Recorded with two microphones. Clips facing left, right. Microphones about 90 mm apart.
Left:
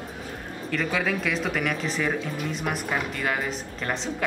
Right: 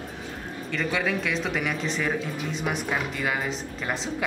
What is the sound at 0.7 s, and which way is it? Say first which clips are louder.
Speech: left 1 dB; centre (ahead or behind).